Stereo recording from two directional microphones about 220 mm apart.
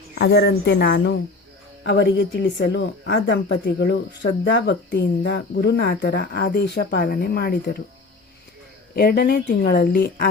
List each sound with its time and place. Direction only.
0.2 s speech: 50° left (ahead or behind)
9.0 s speech: 40° left (ahead or behind)